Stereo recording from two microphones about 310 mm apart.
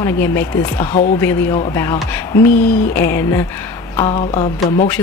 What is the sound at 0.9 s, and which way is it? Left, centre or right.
Speech, left.